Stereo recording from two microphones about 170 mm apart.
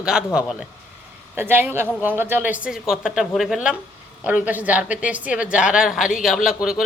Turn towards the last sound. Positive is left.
turn(degrees=-5)  # may be behind; listen again after turning